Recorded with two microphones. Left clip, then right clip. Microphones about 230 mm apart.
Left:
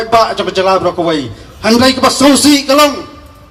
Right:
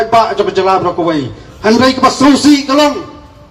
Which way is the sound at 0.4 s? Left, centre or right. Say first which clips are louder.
Even; left.